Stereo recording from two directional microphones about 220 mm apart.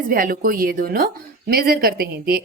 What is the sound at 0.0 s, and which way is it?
A woman's voice, 40° right (ahead or behind).